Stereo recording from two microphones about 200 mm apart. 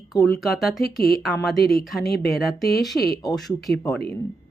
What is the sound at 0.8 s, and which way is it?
Speech, 50° left (ahead or behind).